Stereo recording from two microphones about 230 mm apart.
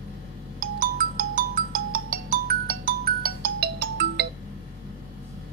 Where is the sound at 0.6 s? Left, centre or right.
Right.